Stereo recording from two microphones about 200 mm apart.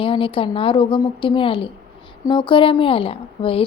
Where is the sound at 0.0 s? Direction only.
25° left (ahead or behind).